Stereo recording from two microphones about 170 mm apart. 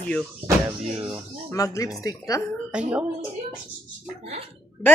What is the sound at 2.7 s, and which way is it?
Speech, 5° right (ahead or behind).